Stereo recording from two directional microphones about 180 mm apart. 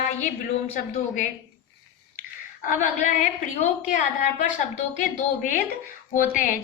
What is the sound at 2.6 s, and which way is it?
A woman's voice, 45° left (ahead or behind).